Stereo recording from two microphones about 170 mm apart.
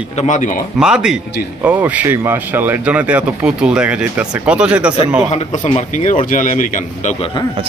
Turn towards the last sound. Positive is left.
turn(degrees=50)  # may be behind; listen again after turning